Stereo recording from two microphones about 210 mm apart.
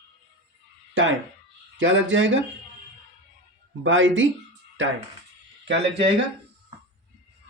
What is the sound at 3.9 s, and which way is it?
Speech, 65° right (ahead or behind).